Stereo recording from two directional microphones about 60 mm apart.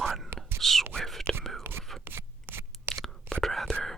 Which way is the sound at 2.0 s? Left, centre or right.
Right.